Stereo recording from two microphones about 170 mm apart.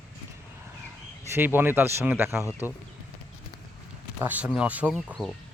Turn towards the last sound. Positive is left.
turn(degrees=0)  # may be behind; listen again after turning